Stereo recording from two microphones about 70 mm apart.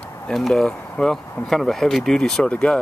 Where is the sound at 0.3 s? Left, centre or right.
Centre.